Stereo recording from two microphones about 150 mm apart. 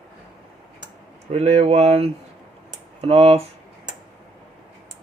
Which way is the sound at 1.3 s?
45° right (ahead or behind).